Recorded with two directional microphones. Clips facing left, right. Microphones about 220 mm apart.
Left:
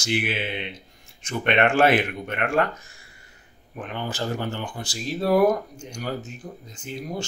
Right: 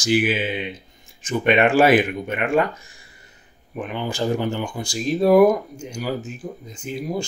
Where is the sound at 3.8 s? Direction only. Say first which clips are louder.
Right 5 dB; 15° right (ahead or behind).